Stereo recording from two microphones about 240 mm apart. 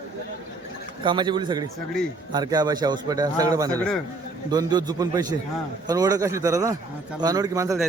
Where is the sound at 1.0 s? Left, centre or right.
Centre.